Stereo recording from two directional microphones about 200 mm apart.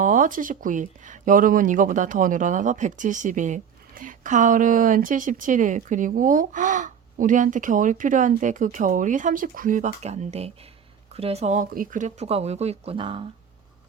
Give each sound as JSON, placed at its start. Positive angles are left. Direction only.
{"t": 0.0, "sound": "speech", "side_deg": -40}